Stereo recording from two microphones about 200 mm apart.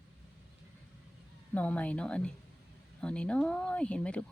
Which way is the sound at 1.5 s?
5° left (ahead or behind).